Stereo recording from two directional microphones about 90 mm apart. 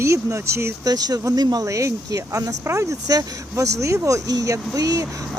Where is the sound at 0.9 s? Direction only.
45° right (ahead or behind).